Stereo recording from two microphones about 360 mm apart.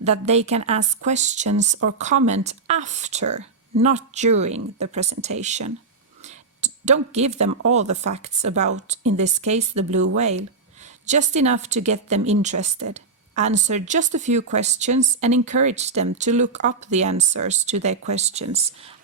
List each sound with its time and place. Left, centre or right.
0.0 s a woman's voice: centre
6.2 s a sound: centre
7.7 s a woman's voice: centre